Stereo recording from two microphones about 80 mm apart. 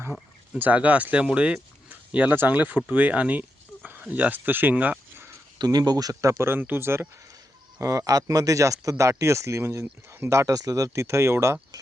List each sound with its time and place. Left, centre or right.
0.1 s speech: centre
1.9 s livestock: centre
2.3 s speech: right
5.5 s speech: right
6.4 s speech: right
7.8 s speech: right